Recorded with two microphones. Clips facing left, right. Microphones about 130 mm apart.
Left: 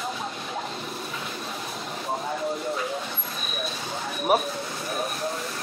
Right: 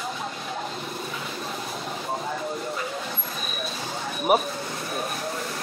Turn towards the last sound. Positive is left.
turn(degrees=0)  # may be behind; listen again after turning